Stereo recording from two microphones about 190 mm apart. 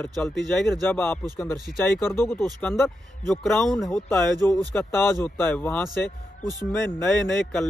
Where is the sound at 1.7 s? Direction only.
50° left (ahead or behind).